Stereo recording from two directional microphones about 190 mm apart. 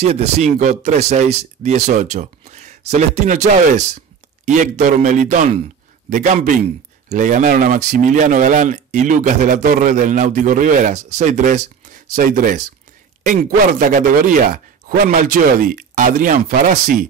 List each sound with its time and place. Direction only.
0.0 s speech: 35° right (ahead or behind)